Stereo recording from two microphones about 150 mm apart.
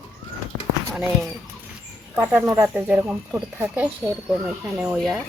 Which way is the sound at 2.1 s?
10° right (ahead or behind).